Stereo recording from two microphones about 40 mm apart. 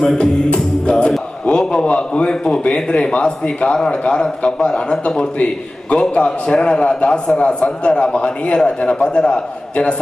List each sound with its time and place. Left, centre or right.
0.2 s music: left
1.5 s a man's voice: left